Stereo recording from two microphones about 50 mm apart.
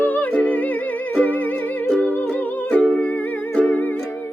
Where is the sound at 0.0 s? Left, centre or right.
Left.